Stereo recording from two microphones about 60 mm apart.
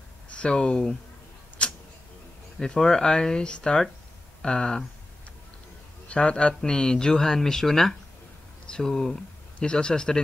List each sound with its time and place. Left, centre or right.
0.3 s speech: centre
1.6 s tick-tock: centre
2.6 s speech: centre
6.0 s speech: centre